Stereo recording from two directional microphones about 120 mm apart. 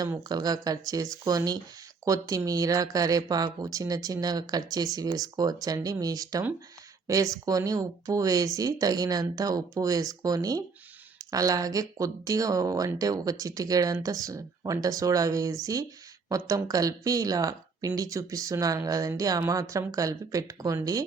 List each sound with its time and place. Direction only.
0.2 s speech: 30° right (ahead or behind)
7.4 s speech: 30° right (ahead or behind)